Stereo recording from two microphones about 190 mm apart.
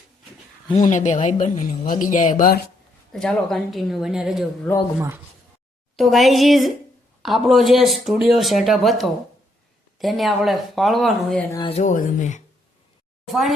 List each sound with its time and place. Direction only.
0.7 s speech: 40° left (ahead or behind)
3.1 s speech: 5° left (ahead or behind)
6.0 s speech: centre (ahead or behind)
11.7 s speech: 40° left (ahead or behind)
13.2 s speech: centre (ahead or behind)